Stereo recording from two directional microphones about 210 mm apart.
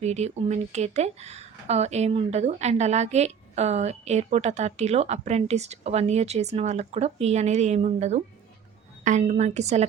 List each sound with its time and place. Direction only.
0.0 s speech: 30° right (ahead or behind)